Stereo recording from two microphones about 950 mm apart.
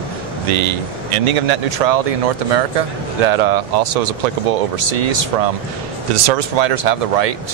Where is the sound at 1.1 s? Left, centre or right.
Right.